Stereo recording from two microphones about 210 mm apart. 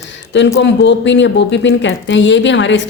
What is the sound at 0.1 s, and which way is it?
Speech, 55° left (ahead or behind).